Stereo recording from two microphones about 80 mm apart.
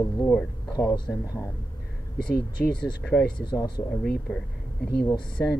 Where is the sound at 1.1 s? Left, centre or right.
Left.